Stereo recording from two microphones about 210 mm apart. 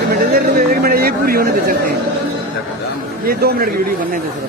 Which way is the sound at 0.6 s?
45° right (ahead or behind).